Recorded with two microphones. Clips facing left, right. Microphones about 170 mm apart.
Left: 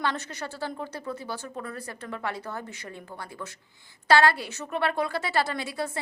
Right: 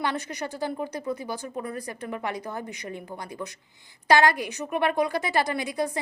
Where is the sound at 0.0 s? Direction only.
15° right (ahead or behind).